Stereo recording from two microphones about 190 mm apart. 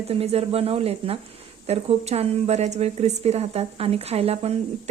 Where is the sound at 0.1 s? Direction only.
30° right (ahead or behind).